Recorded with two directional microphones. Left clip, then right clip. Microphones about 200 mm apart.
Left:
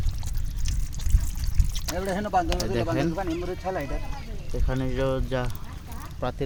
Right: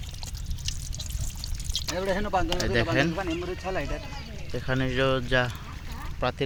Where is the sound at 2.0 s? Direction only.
25° left (ahead or behind).